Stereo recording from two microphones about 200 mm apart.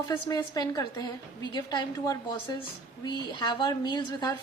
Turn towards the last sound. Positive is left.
turn(degrees=20)  # may be behind; listen again after turning